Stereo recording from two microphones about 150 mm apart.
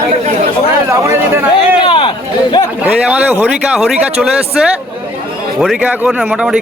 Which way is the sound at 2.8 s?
10° right (ahead or behind).